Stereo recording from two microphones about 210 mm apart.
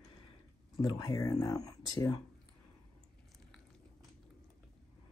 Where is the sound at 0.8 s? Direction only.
20° left (ahead or behind).